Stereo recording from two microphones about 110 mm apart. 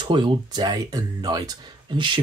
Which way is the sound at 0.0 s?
50° right (ahead or behind).